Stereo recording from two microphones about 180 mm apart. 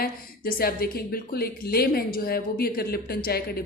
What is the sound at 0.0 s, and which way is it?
Speech, 55° left (ahead or behind).